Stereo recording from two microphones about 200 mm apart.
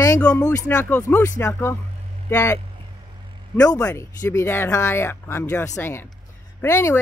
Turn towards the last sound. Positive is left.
turn(degrees=15)  # may be behind; listen again after turning